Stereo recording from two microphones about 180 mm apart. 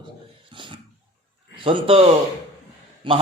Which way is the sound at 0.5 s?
25° right (ahead or behind).